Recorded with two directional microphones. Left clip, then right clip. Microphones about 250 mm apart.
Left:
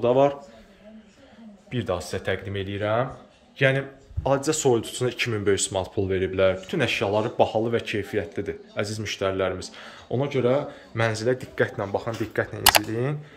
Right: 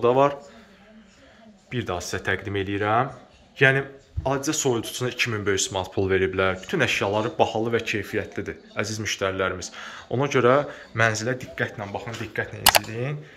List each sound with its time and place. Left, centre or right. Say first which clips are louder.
0.0 s speech: right 1 dB; centre
1.7 s a man's voice: left 1 dB; centre